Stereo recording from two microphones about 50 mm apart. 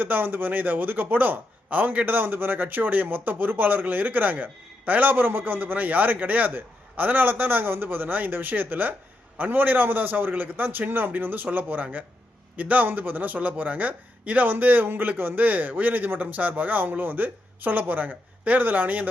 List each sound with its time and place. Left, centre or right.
0.0 s a man's voice: right